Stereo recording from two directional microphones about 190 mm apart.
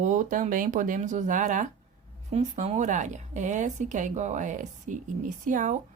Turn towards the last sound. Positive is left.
turn(degrees=-40)  # may be behind; listen again after turning